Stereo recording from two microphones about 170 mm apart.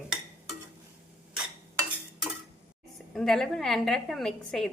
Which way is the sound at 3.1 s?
Centre (ahead or behind).